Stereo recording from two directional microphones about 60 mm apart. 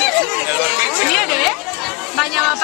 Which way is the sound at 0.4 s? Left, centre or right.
Right.